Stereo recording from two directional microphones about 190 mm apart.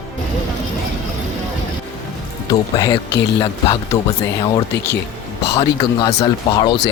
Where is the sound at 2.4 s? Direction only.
20° left (ahead or behind).